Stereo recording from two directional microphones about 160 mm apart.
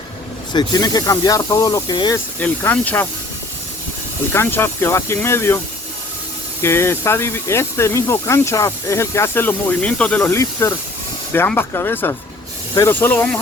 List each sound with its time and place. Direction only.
0.5 s speech: 25° left (ahead or behind)
2.4 s speech: 10° left (ahead or behind)
4.3 s speech: 15° left (ahead or behind)
6.6 s speech: 15° left (ahead or behind)